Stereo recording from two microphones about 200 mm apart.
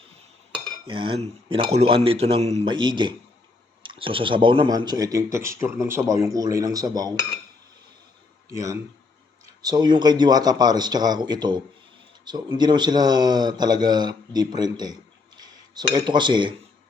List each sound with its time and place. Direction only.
0.9 s speech: 25° right (ahead or behind)
8.4 s speech: 15° right (ahead or behind)